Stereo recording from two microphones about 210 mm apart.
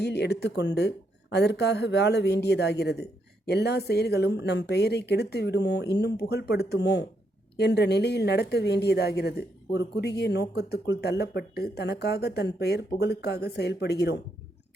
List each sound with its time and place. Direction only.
0.0 s a woman's voice: 50° left (ahead or behind)